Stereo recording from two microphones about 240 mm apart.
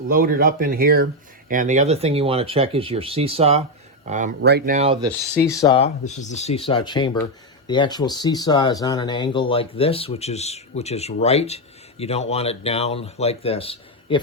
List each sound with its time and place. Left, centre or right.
0.1 s speech: right
4.4 s speech: right
5.3 s speech: centre